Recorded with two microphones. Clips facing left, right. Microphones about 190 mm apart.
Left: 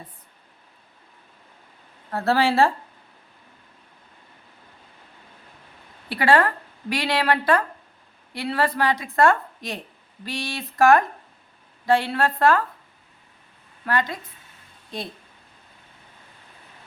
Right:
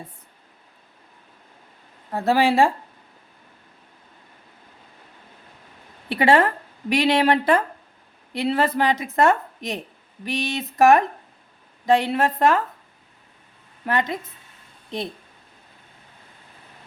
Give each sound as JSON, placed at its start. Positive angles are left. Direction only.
{"t": 2.0, "sound": "speech", "side_deg": -15}
{"t": 6.1, "sound": "speech", "side_deg": -20}
{"t": 13.8, "sound": "speech", "side_deg": -20}